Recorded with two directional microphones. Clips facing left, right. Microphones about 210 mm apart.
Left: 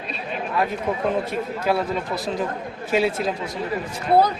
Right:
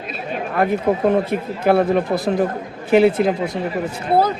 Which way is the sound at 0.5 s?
55° right (ahead or behind).